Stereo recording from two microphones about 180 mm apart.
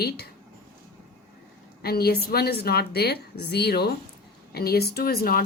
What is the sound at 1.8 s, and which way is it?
Speech, 60° left (ahead or behind).